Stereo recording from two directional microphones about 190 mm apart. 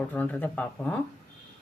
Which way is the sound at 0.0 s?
10° left (ahead or behind).